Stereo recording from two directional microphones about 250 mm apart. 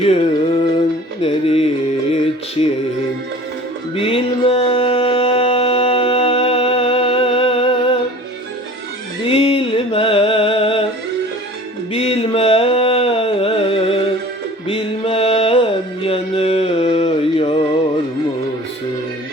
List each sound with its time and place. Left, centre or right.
0.0 s music: left
3.9 s music: left
9.2 s music: left
11.9 s a sound: left
14.7 s music: left